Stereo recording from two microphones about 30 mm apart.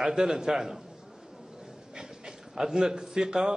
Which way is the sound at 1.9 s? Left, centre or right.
Centre.